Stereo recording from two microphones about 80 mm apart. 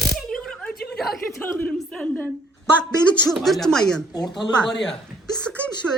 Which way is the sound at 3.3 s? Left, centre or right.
Centre.